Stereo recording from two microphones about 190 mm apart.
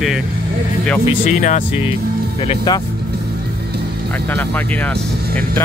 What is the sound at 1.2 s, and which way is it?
Speech, 40° left (ahead or behind).